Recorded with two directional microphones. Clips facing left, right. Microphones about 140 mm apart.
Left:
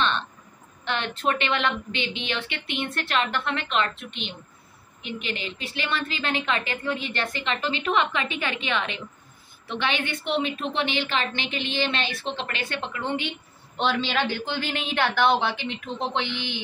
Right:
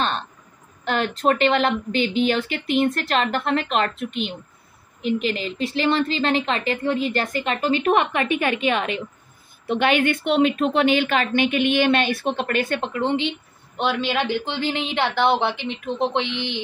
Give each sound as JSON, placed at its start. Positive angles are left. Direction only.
{"t": 0.8, "sound": "a woman's voice", "side_deg": -40}
{"t": 12.9, "sound": "speech", "side_deg": -25}
{"t": 13.7, "sound": "speech", "side_deg": -10}